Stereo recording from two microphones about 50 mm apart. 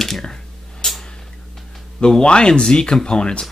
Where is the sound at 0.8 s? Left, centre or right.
Centre.